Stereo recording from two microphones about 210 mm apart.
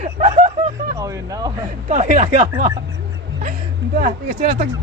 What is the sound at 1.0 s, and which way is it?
Speech, 15° right (ahead or behind).